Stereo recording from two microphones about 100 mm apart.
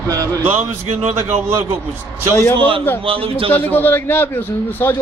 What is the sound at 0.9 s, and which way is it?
Speech, 90° right.